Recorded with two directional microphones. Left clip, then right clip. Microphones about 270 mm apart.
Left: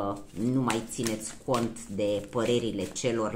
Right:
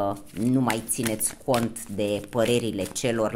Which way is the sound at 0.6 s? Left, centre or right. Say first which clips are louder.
Right 2 dB; right.